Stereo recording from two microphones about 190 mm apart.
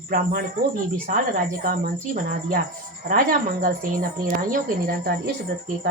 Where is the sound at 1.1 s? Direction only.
45° right (ahead or behind).